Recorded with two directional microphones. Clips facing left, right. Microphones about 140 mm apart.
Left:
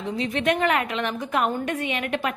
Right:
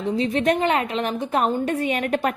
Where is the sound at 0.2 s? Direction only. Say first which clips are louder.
Right 2 dB; 35° right (ahead or behind).